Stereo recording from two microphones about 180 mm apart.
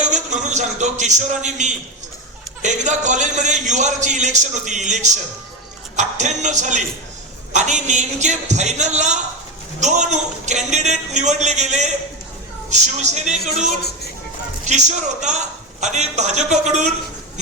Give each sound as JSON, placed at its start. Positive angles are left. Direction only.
{"t": 0.0, "sound": "a man's voice", "side_deg": -40}